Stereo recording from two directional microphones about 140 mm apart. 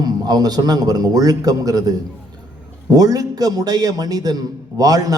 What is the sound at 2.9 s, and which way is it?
A man's voice, 25° right (ahead or behind).